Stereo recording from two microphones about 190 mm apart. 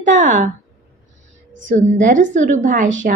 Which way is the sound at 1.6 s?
40° right (ahead or behind).